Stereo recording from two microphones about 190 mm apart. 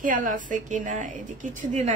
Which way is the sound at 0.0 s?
45° right (ahead or behind).